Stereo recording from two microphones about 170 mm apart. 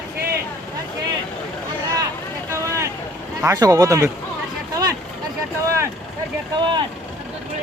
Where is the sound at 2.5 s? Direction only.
15° right (ahead or behind).